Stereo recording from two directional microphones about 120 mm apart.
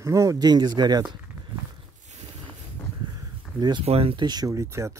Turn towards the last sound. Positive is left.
turn(degrees=-25)  # may be behind; listen again after turning